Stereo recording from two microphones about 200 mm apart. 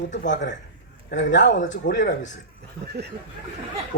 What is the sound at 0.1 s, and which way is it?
Speech, 65° left (ahead or behind).